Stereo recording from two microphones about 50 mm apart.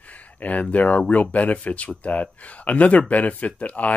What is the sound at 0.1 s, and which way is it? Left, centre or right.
Speech, left.